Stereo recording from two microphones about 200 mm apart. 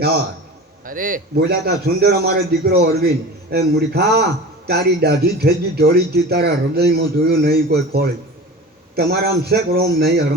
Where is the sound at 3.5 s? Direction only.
55° right (ahead or behind).